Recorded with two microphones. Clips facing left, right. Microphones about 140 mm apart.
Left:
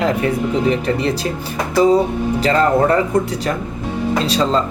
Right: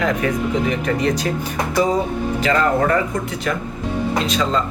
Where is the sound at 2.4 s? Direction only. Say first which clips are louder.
Left 3 dB; 35° left (ahead or behind).